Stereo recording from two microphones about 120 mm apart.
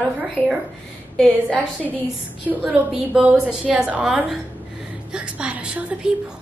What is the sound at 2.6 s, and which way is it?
A woman's voice, 10° right (ahead or behind).